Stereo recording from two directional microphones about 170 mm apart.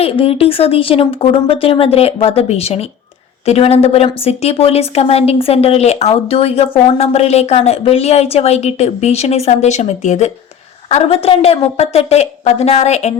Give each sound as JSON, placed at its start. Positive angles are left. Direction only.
{"t": 0.0, "sound": "a woman's voice", "side_deg": 35}